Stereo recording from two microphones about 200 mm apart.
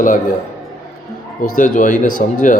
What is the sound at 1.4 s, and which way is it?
Speech, 40° left (ahead or behind).